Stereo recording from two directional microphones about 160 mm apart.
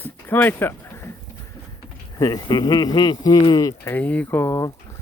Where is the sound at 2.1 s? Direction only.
25° left (ahead or behind).